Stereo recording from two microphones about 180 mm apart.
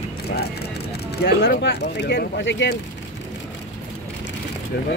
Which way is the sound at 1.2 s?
65° left (ahead or behind).